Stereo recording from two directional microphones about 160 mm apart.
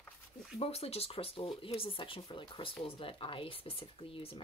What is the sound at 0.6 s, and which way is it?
Speech, 40° left (ahead or behind).